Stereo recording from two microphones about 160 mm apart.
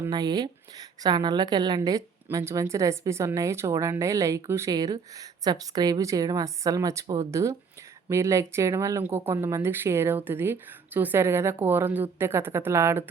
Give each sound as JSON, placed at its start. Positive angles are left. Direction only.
{"t": 0.1, "sound": "a woman's voice", "side_deg": -25}